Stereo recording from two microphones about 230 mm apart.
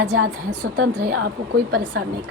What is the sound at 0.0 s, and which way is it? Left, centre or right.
A woman's voice, right.